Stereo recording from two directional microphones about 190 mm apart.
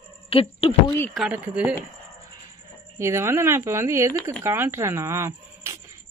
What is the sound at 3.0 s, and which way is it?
Speech, 15° right (ahead or behind).